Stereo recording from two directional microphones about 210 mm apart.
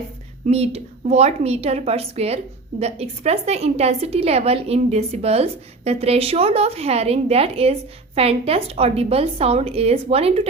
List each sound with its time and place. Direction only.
0.4 s a woman's voice: 30° right (ahead or behind)